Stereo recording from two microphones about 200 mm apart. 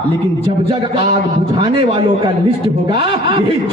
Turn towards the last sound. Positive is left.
turn(degrees=-25)  # may be behind; listen again after turning